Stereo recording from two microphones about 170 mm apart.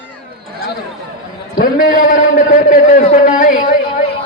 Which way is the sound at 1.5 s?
55° left (ahead or behind).